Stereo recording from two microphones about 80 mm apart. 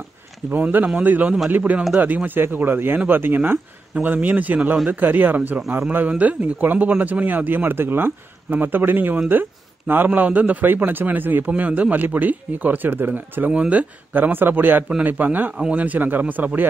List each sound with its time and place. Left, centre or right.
0.5 s a man's voice: right